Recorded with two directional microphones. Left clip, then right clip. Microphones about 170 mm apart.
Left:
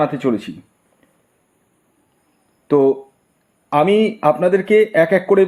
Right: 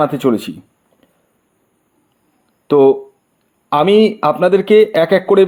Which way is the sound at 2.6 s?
25° right (ahead or behind).